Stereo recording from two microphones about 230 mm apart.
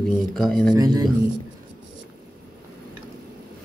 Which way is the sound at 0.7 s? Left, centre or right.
Centre.